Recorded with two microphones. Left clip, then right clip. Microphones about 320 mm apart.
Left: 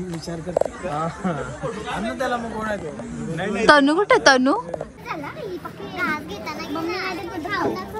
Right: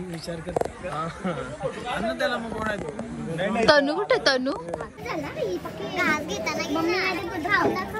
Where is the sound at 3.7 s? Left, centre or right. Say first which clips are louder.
Left 6 dB; centre.